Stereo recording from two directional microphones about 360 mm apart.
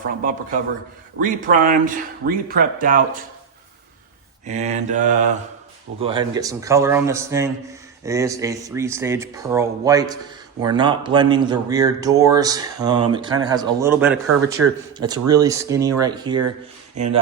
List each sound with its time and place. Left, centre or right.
1.2 s speech: right
4.4 s a man's voice: centre
14.6 s speech: right
14.9 s a man's voice: centre